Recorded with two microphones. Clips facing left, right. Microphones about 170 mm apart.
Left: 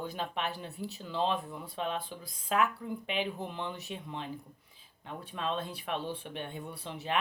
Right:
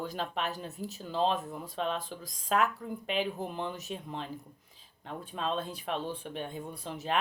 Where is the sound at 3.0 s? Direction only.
45° right (ahead or behind).